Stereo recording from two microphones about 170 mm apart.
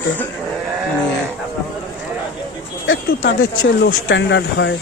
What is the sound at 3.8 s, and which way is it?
Speech, 90° left.